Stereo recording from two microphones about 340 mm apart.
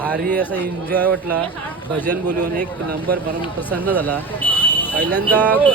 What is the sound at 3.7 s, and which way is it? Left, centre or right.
Speech, centre.